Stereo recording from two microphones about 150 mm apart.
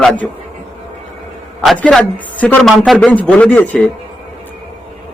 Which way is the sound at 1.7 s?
5° left (ahead or behind).